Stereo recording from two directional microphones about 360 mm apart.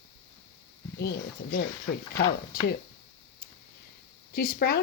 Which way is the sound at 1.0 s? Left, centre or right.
Left.